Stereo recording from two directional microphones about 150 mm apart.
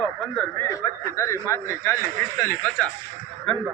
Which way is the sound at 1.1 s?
20° left (ahead or behind).